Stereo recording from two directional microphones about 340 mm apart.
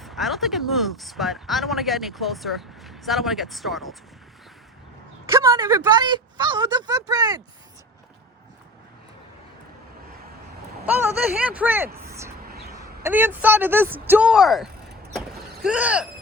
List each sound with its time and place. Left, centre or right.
0.0 s speech: centre
5.3 s speech: centre
10.8 s speech: centre
11.9 s a sound: centre
12.5 s a sound: right
12.7 s speech: centre